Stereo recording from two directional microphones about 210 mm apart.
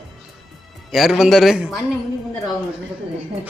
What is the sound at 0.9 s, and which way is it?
Speech, centre (ahead or behind).